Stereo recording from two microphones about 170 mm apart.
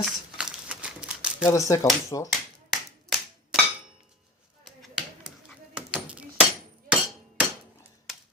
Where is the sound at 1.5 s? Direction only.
20° left (ahead or behind).